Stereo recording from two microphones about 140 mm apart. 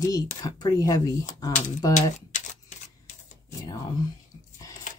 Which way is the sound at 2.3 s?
60° left (ahead or behind).